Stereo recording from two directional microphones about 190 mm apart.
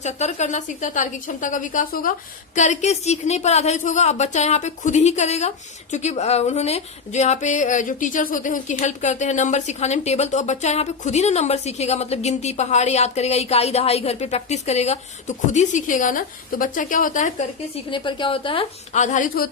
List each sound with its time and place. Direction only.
0.0 s a woman's voice: 35° left (ahead or behind)
17.9 s a woman's voice: 25° left (ahead or behind); by 19.5 s 45° left (ahead or behind)